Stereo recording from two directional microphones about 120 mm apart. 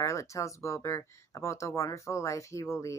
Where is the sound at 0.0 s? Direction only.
25° left (ahead or behind).